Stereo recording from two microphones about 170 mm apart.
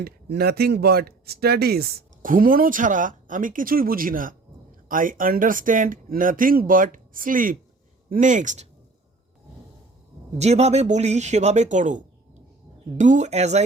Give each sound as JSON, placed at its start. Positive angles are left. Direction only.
{"t": 0.0, "sound": "speech", "side_deg": -65}
{"t": 10.3, "sound": "speech", "side_deg": -40}